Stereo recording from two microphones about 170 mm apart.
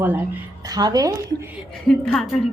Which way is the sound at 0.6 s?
25° right (ahead or behind).